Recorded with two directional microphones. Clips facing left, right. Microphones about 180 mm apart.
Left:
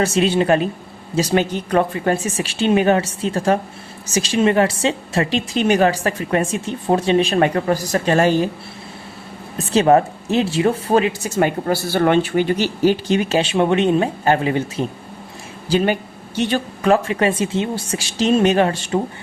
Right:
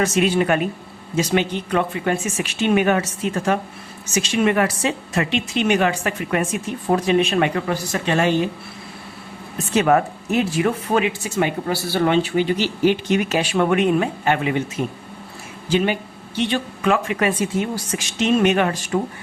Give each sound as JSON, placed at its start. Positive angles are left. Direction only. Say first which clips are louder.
{"t": 0.0, "sound": "a woman's voice", "louder": "left 1 dB", "side_deg": 30}
{"t": 9.7, "sound": "speech", "louder": "left 3 dB", "side_deg": 30}